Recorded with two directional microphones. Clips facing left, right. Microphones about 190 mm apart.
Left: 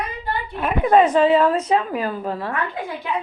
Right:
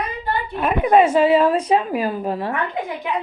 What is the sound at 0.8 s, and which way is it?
A woman's voice, 10° right (ahead or behind).